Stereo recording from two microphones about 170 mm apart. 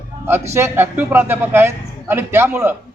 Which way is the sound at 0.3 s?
15° right (ahead or behind).